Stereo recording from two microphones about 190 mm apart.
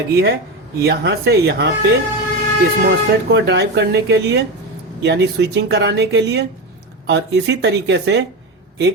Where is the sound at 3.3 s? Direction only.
60° right (ahead or behind).